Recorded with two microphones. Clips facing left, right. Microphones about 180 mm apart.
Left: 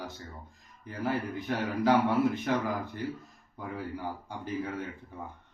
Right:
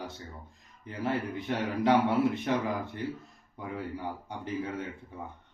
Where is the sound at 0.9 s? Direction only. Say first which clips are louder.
Even; 25° right (ahead or behind).